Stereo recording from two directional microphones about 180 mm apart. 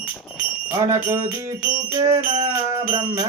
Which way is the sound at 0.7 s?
15° right (ahead or behind).